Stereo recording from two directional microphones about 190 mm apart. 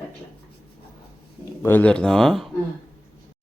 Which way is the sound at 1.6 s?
10° left (ahead or behind).